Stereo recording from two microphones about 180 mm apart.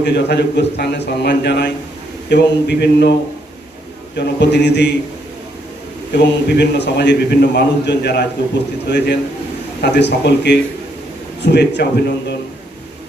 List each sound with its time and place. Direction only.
0.0 s a man's voice: 70° left (ahead or behind)
4.2 s a man's voice: 70° left (ahead or behind)
6.1 s a man's voice: 70° left (ahead or behind)